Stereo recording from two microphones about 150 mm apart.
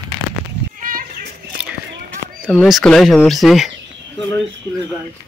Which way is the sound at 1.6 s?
10° right (ahead or behind).